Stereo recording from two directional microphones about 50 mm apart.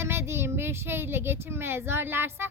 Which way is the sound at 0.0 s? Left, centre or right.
Right.